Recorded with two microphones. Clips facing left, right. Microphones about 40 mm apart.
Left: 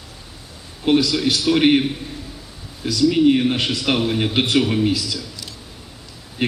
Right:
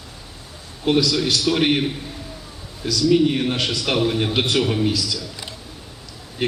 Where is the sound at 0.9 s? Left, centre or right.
Left.